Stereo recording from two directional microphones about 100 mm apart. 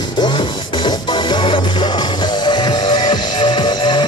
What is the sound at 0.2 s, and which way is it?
Music, 50° left (ahead or behind).